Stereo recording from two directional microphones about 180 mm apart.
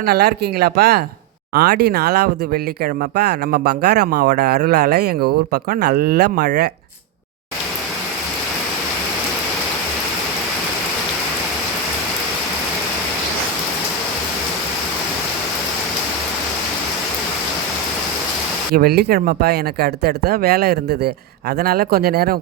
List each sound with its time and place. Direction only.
0.0 s speech: 60° right (ahead or behind)
18.7 s speech: 60° right (ahead or behind)